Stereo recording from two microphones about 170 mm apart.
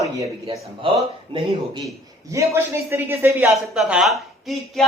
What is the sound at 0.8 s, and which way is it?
Speech, 30° right (ahead or behind).